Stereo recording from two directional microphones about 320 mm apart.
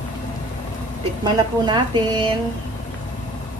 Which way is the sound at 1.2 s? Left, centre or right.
Centre.